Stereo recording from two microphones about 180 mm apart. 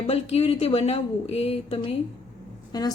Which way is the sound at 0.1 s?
35° left (ahead or behind).